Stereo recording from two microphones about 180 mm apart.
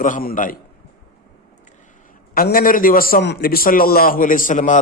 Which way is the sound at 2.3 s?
55° left (ahead or behind).